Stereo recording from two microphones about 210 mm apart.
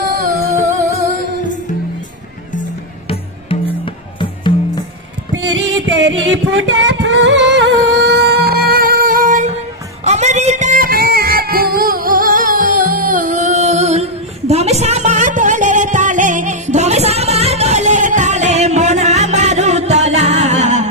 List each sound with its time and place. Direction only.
3.8 s music: 25° left (ahead or behind)
5.3 s music: 60° right (ahead or behind); by 20.9 s 35° right (ahead or behind)